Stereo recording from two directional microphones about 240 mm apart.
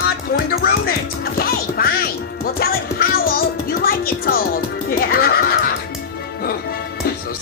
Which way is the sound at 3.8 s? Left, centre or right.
Left.